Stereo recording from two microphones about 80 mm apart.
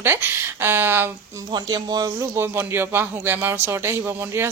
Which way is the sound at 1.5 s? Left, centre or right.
Right.